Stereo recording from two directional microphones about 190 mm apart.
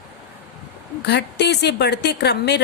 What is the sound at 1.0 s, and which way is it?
A woman's voice, 60° left (ahead or behind).